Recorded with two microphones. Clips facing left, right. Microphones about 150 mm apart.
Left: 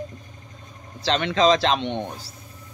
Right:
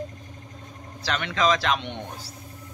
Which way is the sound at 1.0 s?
25° left (ahead or behind).